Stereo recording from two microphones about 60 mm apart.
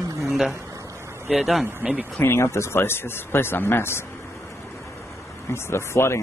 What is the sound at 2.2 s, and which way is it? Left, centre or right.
Speech, left.